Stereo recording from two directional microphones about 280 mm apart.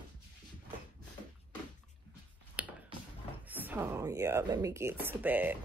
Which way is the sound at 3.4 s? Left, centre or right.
Centre.